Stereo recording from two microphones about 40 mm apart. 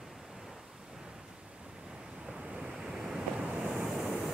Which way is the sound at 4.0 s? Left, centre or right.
Centre.